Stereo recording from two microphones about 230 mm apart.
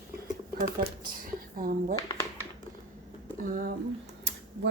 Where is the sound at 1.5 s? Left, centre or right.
Right.